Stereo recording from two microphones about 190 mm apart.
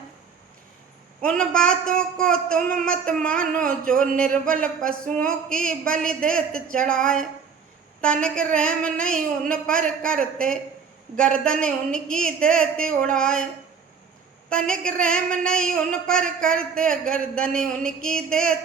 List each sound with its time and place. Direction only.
1.2 s speech: 5° left (ahead or behind)
14.5 s speech: 5° left (ahead or behind)